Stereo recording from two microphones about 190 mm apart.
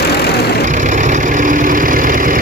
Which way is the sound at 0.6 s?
40° right (ahead or behind).